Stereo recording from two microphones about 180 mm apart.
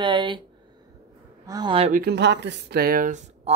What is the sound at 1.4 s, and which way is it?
Speech, 25° right (ahead or behind).